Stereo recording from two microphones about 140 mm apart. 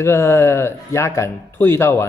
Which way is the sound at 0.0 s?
20° left (ahead or behind).